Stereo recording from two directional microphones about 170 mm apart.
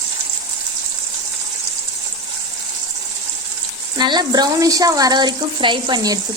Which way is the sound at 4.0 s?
25° right (ahead or behind).